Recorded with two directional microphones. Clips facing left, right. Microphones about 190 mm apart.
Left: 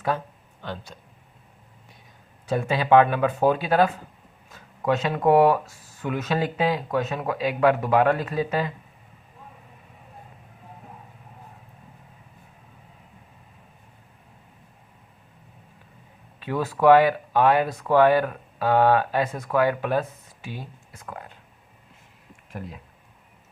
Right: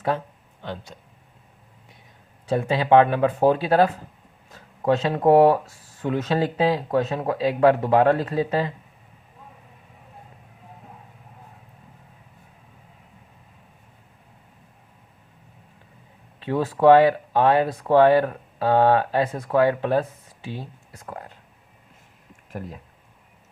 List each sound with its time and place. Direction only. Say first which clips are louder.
0.6 s speech: right 1 dB; 20° right (ahead or behind)
2.5 s speech: right 1 dB; 30° right (ahead or behind)
16.4 s speech: right 2 dB; 25° right (ahead or behind)